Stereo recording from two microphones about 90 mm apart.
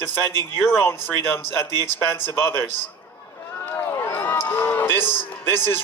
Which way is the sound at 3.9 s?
30° left (ahead or behind).